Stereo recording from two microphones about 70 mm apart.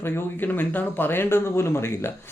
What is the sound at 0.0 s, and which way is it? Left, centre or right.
Speech, left.